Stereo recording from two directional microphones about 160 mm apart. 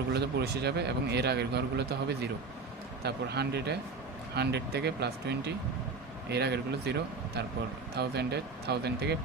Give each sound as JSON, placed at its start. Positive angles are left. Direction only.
{"t": 0.1, "sound": "a man's voice", "side_deg": -90}
{"t": 3.0, "sound": "a man's voice", "side_deg": -90}